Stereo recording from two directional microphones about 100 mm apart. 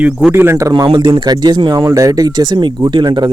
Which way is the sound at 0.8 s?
55° right (ahead or behind).